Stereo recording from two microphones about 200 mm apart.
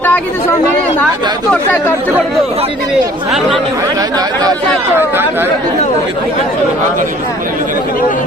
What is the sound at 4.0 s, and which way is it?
Speech, 20° right (ahead or behind).